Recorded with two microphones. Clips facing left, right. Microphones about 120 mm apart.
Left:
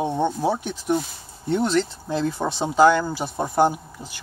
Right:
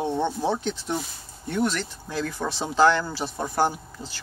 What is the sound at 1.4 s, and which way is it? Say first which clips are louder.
Speech: left 5 dB; 25° left (ahead or behind).